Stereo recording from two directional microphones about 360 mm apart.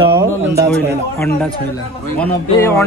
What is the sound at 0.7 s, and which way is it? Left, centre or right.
A man's voice, centre.